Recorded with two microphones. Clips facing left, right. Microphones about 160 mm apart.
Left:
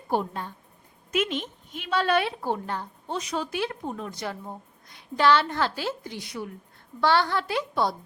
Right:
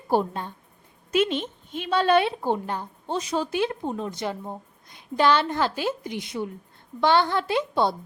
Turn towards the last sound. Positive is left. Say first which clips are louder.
# right 3 dB
turn(degrees=-25)  # may be behind; listen again after turning